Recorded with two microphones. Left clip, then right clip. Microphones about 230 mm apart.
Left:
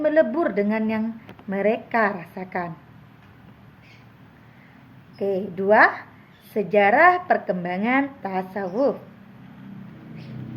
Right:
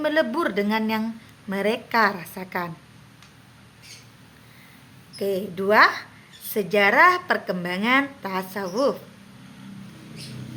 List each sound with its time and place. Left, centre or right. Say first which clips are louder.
0.0 s a woman's voice: left 3 dB; centre
5.2 s a woman's voice: left 1 dB; centre